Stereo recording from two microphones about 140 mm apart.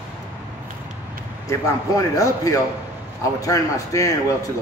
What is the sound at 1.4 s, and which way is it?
A man's voice, 25° left (ahead or behind).